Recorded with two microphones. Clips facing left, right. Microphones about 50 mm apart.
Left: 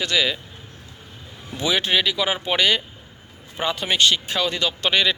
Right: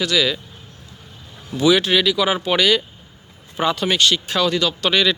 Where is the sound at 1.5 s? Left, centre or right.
Left.